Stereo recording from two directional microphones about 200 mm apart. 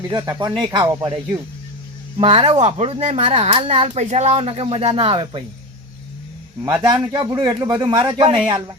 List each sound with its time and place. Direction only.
0.1 s speech: 20° right (ahead or behind)
6.7 s speech: 15° right (ahead or behind)